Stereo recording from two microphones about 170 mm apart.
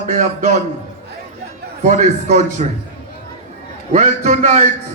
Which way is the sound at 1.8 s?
45° right (ahead or behind).